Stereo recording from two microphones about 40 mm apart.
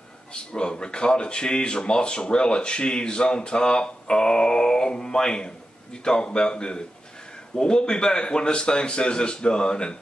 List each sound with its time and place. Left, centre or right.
0.3 s speech: left